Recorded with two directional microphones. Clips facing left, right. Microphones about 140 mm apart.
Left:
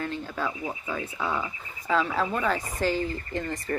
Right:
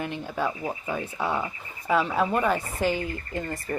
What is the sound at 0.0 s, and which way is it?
Speech, 15° right (ahead or behind).